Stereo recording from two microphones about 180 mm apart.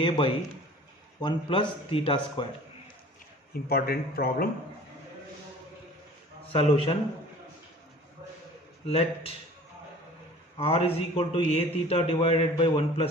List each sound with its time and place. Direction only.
0.0 s speech: 30° left (ahead or behind)
3.7 s speech: 55° left (ahead or behind)
6.5 s a man's voice: 30° left (ahead or behind)
8.9 s a man's voice: 35° left (ahead or behind)
10.6 s a man's voice: 30° left (ahead or behind)